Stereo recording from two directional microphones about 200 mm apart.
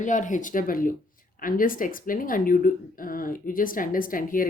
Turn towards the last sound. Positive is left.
turn(degrees=45)  # may be behind; listen again after turning